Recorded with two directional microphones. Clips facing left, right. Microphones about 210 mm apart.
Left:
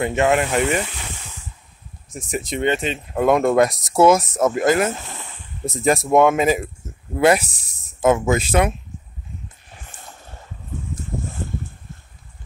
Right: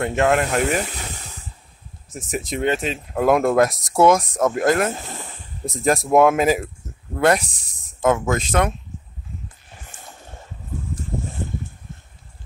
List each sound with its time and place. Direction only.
0.0 s speech: centre (ahead or behind)
1.0 s snake: 40° right (ahead or behind)
2.0 s speech: centre (ahead or behind)